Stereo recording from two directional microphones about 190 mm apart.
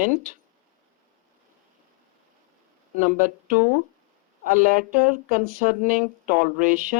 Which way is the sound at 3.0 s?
45° right (ahead or behind).